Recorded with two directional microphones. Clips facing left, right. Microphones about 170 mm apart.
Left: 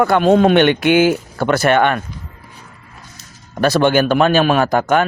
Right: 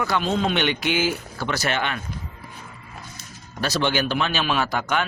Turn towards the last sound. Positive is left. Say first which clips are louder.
# left 9 dB
turn(degrees=50)  # may be behind; listen again after turning